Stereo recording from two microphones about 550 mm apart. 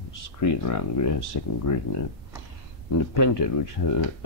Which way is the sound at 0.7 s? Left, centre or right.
Left.